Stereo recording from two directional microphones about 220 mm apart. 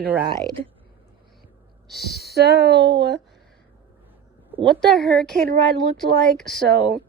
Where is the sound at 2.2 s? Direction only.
45° right (ahead or behind).